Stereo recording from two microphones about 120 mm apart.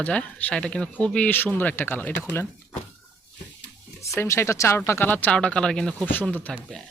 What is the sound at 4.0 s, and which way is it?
Speech, 25° left (ahead or behind).